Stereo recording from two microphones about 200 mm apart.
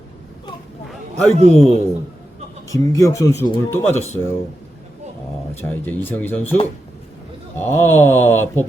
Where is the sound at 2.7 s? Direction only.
15° left (ahead or behind).